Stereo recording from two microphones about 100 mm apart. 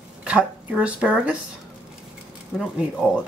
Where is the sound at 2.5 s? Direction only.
5° right (ahead or behind).